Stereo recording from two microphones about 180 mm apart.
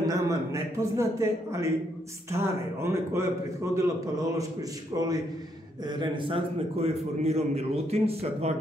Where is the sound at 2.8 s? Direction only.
15° right (ahead or behind).